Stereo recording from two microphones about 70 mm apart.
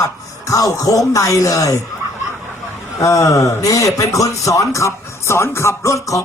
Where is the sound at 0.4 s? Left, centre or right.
Left.